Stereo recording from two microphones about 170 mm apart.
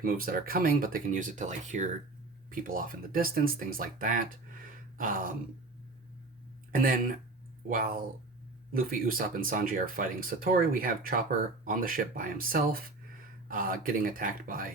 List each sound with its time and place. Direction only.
0.0 s speech: 55° right (ahead or behind)
4.9 s groan: 55° right (ahead or behind)
7.7 s speech: 55° right (ahead or behind)